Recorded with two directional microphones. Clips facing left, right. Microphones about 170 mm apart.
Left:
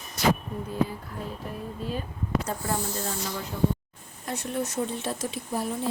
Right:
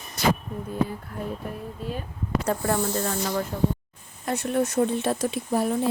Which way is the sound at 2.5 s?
65° right (ahead or behind).